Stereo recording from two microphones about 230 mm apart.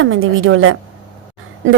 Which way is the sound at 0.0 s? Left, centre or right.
Right.